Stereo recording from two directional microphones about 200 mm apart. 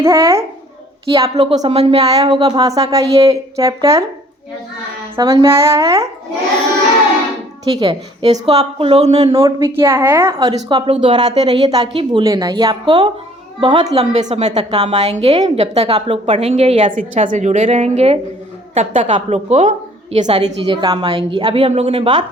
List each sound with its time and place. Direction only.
0.0 s a woman's voice: 15° right (ahead or behind)
1.4 s a woman's voice: 30° right (ahead or behind); by 4.0 s 15° right (ahead or behind)
5.1 s a woman's voice: 20° right (ahead or behind)
7.7 s a woman's voice: 30° right (ahead or behind)
9.3 s a woman's voice: 15° right (ahead or behind)